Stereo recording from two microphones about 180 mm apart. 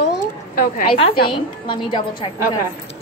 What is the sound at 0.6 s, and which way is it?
Speech, 50° left (ahead or behind).